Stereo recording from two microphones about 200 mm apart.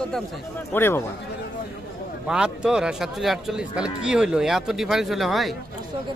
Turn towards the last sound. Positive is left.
turn(degrees=0)  # may be behind; listen again after turning